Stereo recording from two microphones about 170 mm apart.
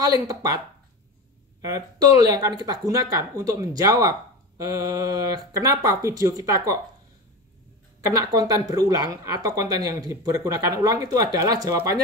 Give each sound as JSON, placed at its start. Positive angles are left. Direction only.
{"t": 0.0, "sound": "a woman's voice", "side_deg": -20}
{"t": 1.6, "sound": "a woman's voice", "side_deg": -20}
{"t": 8.1, "sound": "a woman's voice", "side_deg": -20}